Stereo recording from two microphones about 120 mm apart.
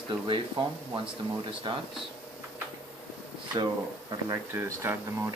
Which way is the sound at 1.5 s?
45° right (ahead or behind).